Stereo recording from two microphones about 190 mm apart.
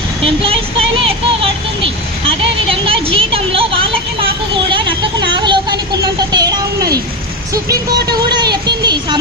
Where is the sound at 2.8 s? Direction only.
30° right (ahead or behind).